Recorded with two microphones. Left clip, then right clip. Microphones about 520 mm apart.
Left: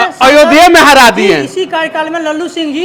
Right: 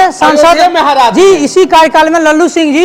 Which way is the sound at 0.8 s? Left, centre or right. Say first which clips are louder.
Left 3 dB; left.